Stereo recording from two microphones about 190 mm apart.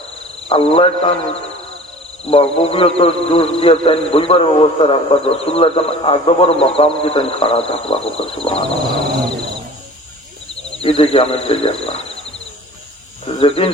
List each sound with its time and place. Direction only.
0.4 s a man's voice: 30° left (ahead or behind)
10.8 s a man's voice: 30° left (ahead or behind)
13.2 s speech: 30° left (ahead or behind)